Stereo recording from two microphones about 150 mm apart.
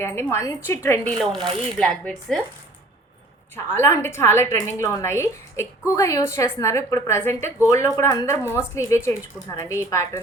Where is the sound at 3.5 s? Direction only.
15° left (ahead or behind).